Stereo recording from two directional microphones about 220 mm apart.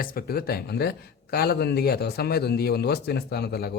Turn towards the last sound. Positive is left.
turn(degrees=45)  # may be behind; listen again after turning